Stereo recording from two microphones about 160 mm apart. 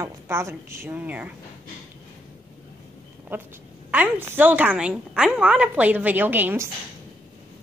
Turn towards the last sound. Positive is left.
turn(degrees=-15)  # may be behind; listen again after turning